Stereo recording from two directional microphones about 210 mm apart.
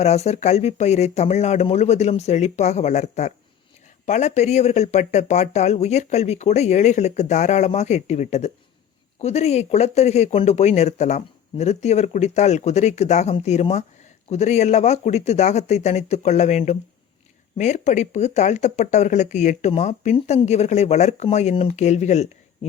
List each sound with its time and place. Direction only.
0.0 s speech: 30° left (ahead or behind)